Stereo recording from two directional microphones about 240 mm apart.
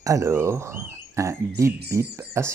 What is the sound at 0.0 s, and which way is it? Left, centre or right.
Speech, centre.